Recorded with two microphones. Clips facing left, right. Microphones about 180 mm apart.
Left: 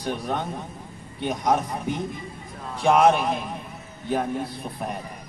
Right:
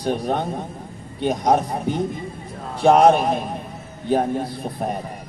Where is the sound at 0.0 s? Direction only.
35° right (ahead or behind).